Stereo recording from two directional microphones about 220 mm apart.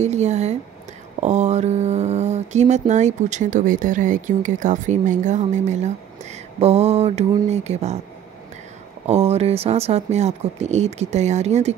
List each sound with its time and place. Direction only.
0.0 s speech: 30° right (ahead or behind)
9.0 s speech: 30° right (ahead or behind)